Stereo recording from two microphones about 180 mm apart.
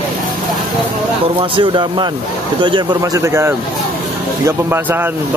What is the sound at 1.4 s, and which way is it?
A man's voice, 30° right (ahead or behind).